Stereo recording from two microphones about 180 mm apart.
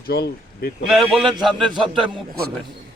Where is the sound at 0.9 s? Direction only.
Centre (ahead or behind).